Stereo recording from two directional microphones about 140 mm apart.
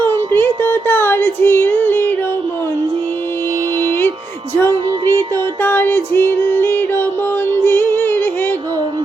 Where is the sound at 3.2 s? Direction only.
15° left (ahead or behind).